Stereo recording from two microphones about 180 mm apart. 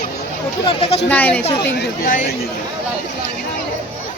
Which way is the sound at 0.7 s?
30° left (ahead or behind).